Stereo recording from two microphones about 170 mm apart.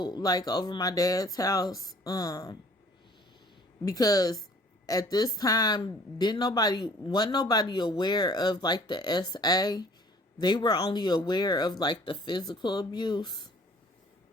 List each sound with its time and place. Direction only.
0.0 s speech: 25° left (ahead or behind)
3.8 s speech: 20° left (ahead or behind)